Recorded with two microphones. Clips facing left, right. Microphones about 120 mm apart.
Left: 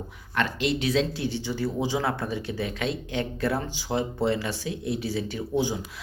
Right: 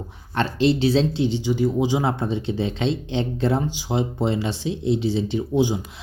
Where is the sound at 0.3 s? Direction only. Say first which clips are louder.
Right 6 dB; 30° right (ahead or behind).